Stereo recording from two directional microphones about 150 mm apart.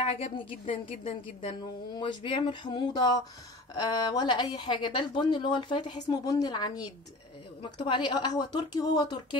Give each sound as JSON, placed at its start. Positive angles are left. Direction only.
{"t": 0.0, "sound": "a woman's voice", "side_deg": 40}
{"t": 7.7, "sound": "speech", "side_deg": 35}